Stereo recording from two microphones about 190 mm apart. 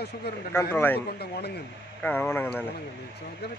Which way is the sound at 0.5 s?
10° left (ahead or behind).